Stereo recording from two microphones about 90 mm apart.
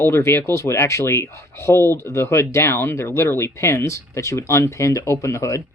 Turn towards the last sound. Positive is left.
turn(degrees=35)  # may be behind; listen again after turning